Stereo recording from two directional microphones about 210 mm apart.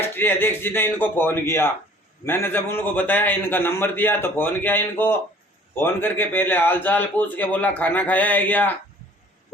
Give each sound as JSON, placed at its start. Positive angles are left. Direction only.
{"t": 0.1, "sound": "a man's voice", "side_deg": 10}